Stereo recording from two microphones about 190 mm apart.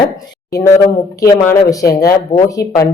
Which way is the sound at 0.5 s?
15° left (ahead or behind).